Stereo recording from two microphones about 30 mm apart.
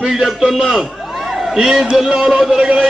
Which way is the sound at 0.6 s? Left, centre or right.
Centre.